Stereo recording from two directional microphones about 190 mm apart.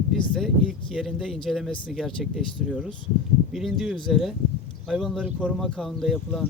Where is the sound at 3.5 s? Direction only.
Centre (ahead or behind).